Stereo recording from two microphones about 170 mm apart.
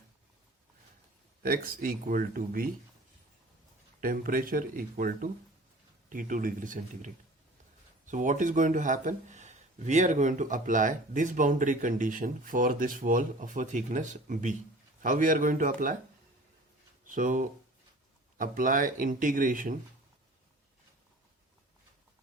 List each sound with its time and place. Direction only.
1.4 s speech: 60° right (ahead or behind)
4.0 s speech: 55° right (ahead or behind)
17.2 s speech: 50° right (ahead or behind)